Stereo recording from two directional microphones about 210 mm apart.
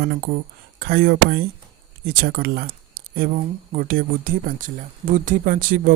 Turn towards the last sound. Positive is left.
turn(degrees=-40)  # may be behind; listen again after turning